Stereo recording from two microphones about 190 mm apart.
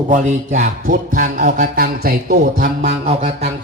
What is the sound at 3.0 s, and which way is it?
Speech, 35° right (ahead or behind).